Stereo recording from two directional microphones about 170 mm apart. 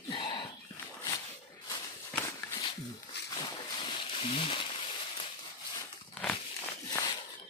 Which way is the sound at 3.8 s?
35° left (ahead or behind).